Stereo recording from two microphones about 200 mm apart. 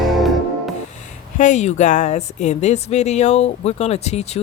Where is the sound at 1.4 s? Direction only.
35° left (ahead or behind).